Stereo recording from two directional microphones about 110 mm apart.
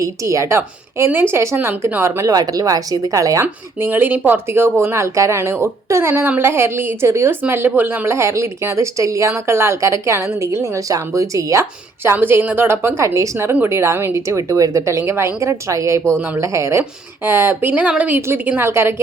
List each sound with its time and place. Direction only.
0.0 s speech: 30° right (ahead or behind)
3.4 s speech: 20° right (ahead or behind)
12.0 s speech: 20° right (ahead or behind)